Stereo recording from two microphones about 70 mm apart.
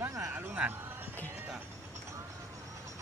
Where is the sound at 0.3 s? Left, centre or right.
Right.